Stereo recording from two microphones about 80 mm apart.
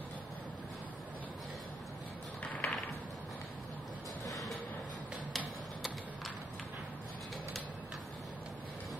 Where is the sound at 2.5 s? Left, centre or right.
Centre.